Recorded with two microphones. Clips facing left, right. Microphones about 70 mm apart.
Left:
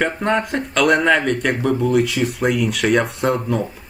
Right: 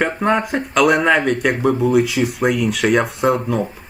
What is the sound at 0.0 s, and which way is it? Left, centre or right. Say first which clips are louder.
Speech: right 2 dB; centre.